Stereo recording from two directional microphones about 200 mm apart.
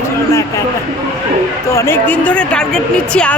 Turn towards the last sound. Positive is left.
turn(degrees=5)  # may be behind; listen again after turning